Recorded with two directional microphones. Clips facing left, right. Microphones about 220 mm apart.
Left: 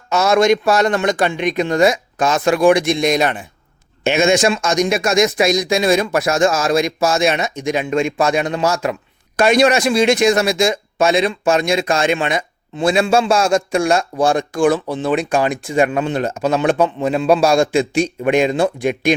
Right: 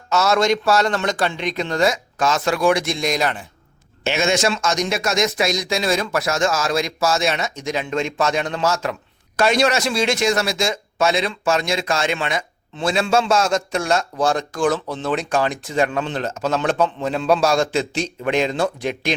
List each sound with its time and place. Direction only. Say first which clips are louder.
0.1 s speech: left 4 dB; 15° left (ahead or behind)